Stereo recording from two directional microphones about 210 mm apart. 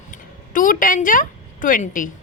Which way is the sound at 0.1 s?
40° left (ahead or behind).